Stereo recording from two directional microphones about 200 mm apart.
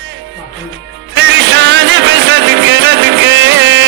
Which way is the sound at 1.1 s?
65° right (ahead or behind).